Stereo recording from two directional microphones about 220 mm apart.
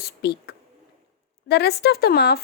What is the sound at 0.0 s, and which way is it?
A woman's voice, 50° left (ahead or behind).